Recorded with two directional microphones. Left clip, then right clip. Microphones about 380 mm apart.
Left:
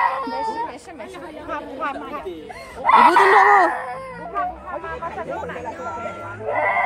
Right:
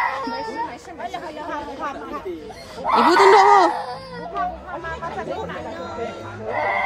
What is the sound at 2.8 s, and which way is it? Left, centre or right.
Speech, left.